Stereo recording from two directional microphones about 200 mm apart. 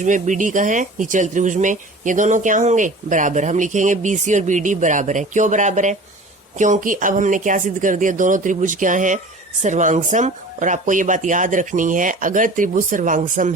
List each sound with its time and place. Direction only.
0.0 s speech: 40° right (ahead or behind)